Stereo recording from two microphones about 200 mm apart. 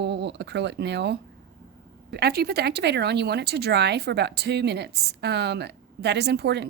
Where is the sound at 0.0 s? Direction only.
60° right (ahead or behind).